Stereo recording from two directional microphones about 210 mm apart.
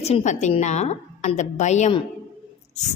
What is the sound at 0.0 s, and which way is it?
A woman's voice, 30° left (ahead or behind).